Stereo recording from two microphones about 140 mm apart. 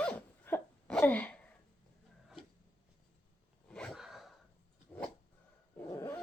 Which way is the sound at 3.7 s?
5° left (ahead or behind).